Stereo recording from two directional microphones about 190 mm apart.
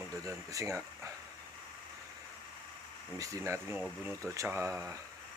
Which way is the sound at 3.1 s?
15° right (ahead or behind).